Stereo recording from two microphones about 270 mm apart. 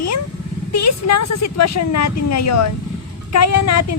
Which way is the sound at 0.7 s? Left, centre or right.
Left.